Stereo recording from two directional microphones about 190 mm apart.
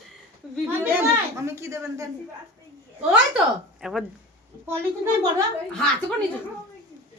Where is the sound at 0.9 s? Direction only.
15° right (ahead or behind).